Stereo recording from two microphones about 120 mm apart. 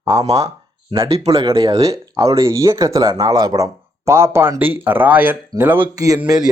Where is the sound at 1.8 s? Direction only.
30° right (ahead or behind).